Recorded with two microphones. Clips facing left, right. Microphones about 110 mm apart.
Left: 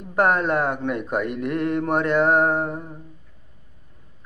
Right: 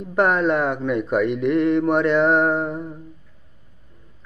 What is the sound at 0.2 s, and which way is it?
Mantra, 50° left (ahead or behind).